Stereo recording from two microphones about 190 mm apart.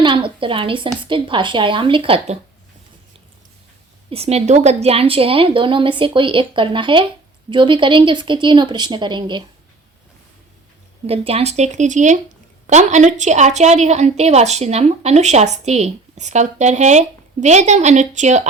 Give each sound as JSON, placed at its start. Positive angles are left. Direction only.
{"t": 0.0, "sound": "a woman's voice", "side_deg": -25}
{"t": 4.1, "sound": "a woman's voice", "side_deg": -35}
{"t": 11.0, "sound": "a woman's voice", "side_deg": -30}